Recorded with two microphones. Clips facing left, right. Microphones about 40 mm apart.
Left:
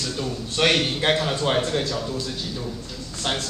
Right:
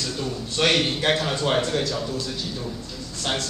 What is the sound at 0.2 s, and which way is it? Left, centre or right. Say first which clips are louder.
A man's voice: left 1 dB; centre.